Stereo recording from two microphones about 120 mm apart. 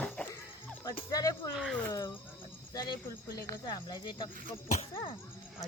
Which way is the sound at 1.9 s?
30° left (ahead or behind).